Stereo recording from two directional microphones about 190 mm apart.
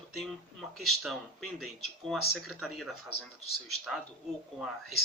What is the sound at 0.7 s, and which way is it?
Speech, centre (ahead or behind).